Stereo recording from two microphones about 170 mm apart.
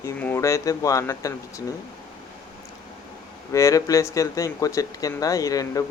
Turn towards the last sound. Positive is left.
turn(degrees=20)  # may be behind; listen again after turning